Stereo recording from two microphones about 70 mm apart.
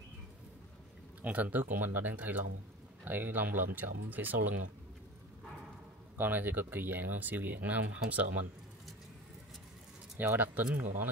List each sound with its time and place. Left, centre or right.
1.2 s speech: right
6.1 s speech: right
10.1 s speech: right